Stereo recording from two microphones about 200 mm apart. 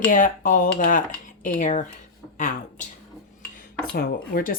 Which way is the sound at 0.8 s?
40° left (ahead or behind).